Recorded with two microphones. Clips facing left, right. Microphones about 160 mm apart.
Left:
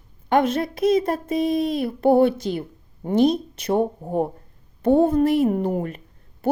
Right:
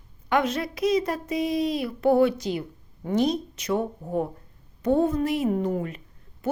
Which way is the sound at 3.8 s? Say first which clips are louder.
Left 4 dB; 30° left (ahead or behind).